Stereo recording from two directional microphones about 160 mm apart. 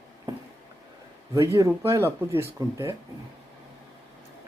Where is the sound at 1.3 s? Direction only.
20° right (ahead or behind).